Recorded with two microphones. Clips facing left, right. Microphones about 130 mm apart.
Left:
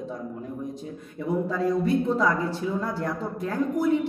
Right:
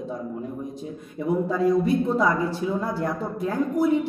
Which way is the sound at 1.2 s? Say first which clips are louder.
Right 3 dB; 15° right (ahead or behind).